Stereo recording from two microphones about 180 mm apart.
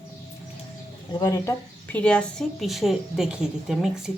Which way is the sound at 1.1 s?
20° left (ahead or behind).